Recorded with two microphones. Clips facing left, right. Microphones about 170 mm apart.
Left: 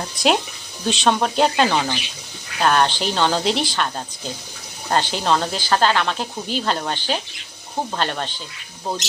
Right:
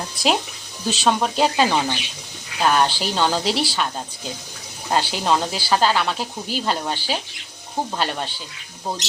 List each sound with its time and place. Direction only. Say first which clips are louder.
0.9 s speech: left 1 dB; 5° right (ahead or behind)
4.9 s speech: left 1 dB; 10° right (ahead or behind)